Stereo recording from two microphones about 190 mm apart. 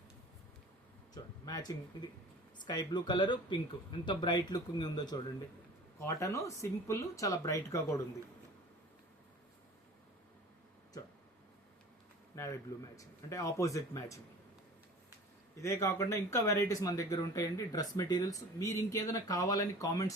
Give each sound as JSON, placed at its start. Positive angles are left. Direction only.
{"t": 1.1, "sound": "speech", "side_deg": 20}
{"t": 12.4, "sound": "a sound", "side_deg": 15}
{"t": 13.0, "sound": "speech", "side_deg": 15}
{"t": 15.5, "sound": "speech", "side_deg": 15}